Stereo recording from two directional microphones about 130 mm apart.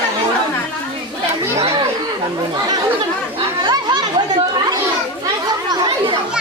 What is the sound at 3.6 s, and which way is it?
Children playing, 35° right (ahead or behind).